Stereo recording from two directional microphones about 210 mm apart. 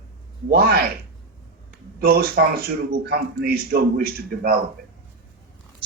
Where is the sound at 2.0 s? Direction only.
50° right (ahead or behind).